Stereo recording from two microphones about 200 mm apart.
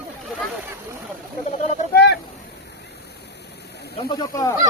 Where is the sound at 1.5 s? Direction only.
35° left (ahead or behind).